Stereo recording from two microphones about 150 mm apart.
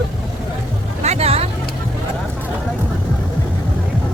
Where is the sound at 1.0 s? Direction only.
45° right (ahead or behind).